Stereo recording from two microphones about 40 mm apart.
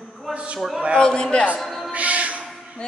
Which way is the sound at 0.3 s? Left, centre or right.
Right.